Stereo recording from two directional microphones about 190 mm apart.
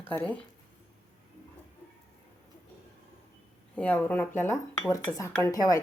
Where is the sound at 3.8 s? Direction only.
10° left (ahead or behind).